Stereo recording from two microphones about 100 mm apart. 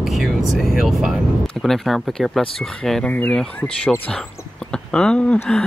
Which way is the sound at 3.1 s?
15° left (ahead or behind).